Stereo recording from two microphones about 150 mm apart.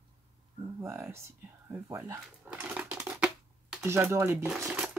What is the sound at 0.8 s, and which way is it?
Speech, 20° right (ahead or behind).